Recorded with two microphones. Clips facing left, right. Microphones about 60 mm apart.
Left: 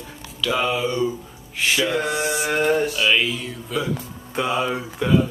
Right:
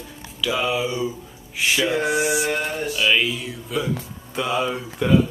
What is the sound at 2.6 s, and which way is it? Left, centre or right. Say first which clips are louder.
Music: left 7 dB; left.